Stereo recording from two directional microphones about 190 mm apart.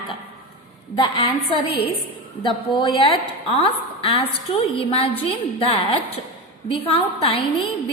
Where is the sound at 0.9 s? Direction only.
25° left (ahead or behind).